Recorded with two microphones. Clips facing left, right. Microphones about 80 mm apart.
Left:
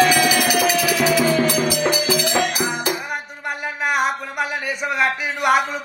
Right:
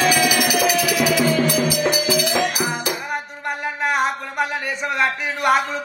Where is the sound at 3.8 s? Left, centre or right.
Centre.